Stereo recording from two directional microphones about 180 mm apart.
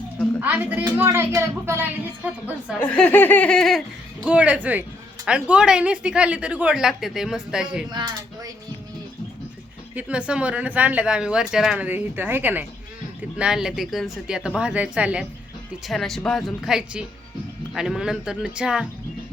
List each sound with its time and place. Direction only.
0.3 s speech: 10° right (ahead or behind)
2.8 s speech: 10° left (ahead or behind)
7.9 s speech: 25° right (ahead or behind)
9.9 s speech: 10° right (ahead or behind)